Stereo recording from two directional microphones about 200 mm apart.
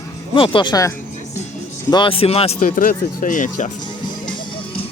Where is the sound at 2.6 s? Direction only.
45° left (ahead or behind).